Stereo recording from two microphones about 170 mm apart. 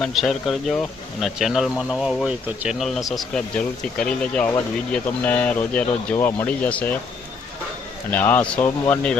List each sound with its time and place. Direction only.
0.0 s speech: centre (ahead or behind)
8.1 s speech: 10° left (ahead or behind)